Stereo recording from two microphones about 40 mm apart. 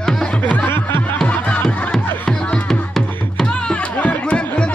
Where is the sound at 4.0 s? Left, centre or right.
Left.